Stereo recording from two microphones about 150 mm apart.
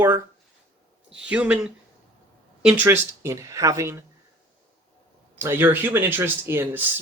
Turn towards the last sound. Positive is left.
turn(degrees=-15)  # may be behind; listen again after turning